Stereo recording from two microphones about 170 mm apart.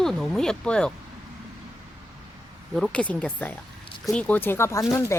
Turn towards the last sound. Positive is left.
turn(degrees=15)  # may be behind; listen again after turning